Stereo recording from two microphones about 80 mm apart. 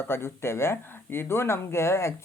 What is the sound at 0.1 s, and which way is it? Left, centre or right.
Speech, left.